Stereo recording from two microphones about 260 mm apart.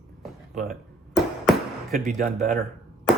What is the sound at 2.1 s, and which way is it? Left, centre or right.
Speech, right.